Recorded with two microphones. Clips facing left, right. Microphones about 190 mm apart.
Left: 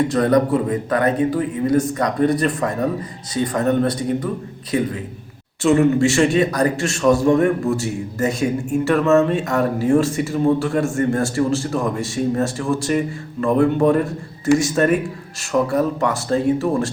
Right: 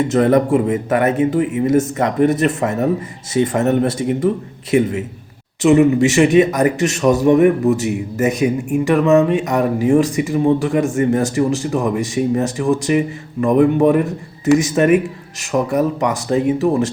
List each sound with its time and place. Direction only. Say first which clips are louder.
0.0 s a man's voice: right 2 dB; 25° right (ahead or behind)
5.6 s a man's voice: right 3 dB; 15° right (ahead or behind)